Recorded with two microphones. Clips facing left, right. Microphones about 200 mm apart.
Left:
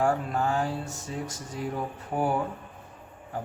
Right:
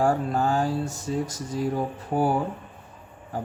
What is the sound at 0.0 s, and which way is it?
Mantra, 35° right (ahead or behind).